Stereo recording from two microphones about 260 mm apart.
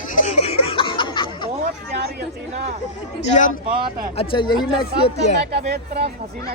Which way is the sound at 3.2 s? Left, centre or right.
Left.